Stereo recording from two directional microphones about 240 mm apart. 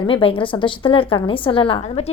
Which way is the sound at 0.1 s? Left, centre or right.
Left.